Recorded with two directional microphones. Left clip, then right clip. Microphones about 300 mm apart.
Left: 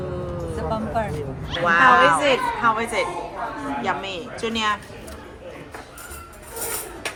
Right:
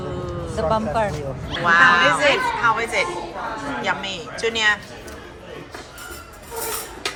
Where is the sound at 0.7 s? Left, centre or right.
Centre.